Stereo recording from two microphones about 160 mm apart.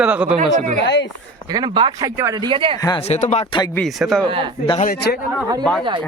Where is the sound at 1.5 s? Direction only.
25° right (ahead or behind).